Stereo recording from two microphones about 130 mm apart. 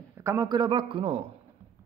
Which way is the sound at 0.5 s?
40° right (ahead or behind).